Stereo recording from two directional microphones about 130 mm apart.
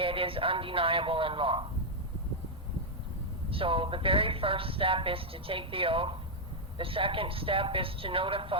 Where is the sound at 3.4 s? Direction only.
45° right (ahead or behind).